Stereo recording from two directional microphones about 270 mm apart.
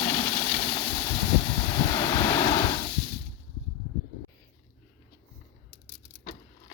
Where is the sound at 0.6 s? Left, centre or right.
Left.